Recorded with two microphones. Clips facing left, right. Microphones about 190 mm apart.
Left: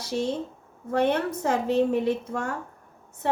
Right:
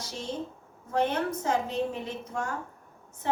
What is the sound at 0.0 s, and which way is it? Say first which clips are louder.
A woman's voice: left 7 dB; 65° left (ahead or behind).